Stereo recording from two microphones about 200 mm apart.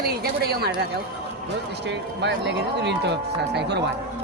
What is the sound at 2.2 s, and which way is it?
Speech, 60° right (ahead or behind).